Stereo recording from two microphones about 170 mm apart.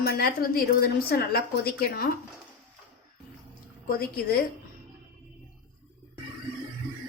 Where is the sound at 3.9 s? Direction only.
65° left (ahead or behind).